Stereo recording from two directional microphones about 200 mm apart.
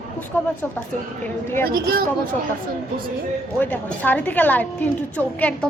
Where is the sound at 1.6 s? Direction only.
50° right (ahead or behind).